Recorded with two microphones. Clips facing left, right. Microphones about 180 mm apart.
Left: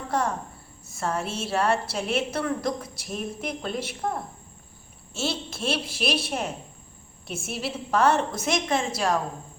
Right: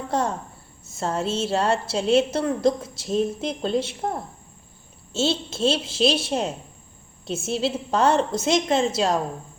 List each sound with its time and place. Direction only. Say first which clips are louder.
0.1 s a woman's voice: right 1 dB; 25° right (ahead or behind)
5.1 s a woman's voice: right 6 dB; 25° right (ahead or behind)